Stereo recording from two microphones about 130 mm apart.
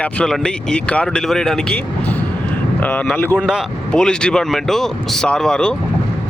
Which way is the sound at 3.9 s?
5° left (ahead or behind).